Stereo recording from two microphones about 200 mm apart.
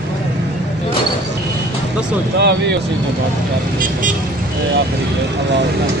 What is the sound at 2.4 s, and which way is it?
Speech, 60° right (ahead or behind).